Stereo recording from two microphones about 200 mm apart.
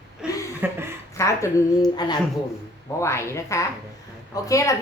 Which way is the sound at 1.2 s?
15° left (ahead or behind).